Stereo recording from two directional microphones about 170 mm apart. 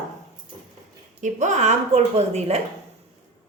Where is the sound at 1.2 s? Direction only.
45° right (ahead or behind).